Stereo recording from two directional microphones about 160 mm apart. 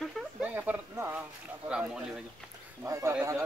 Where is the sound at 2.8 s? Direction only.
15° right (ahead or behind).